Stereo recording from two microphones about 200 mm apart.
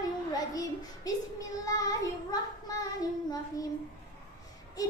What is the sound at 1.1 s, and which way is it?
Speech, 20° left (ahead or behind).